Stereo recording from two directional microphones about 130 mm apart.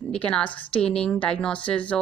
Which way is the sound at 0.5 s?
40° left (ahead or behind).